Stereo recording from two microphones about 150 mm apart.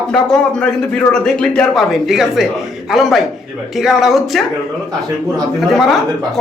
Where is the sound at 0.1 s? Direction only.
5° left (ahead or behind).